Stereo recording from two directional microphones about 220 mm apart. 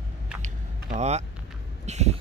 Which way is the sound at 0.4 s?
30° right (ahead or behind).